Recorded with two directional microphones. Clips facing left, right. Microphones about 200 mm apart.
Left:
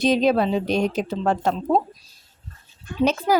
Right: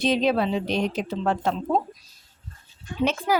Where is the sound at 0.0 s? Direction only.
40° left (ahead or behind).